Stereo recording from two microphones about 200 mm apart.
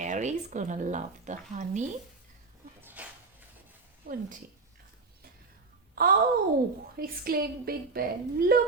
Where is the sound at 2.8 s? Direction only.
10° right (ahead or behind).